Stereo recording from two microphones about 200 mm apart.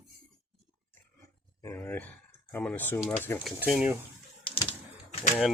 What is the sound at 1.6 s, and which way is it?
Speech, 15° left (ahead or behind).